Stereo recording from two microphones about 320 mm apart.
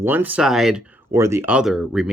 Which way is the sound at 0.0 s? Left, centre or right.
Centre.